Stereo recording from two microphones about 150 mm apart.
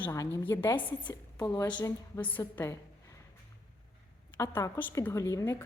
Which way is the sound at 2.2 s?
10° left (ahead or behind).